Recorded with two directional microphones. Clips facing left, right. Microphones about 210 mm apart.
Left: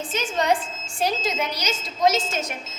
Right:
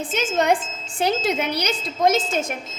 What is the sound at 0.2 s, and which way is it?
Speech, 55° right (ahead or behind).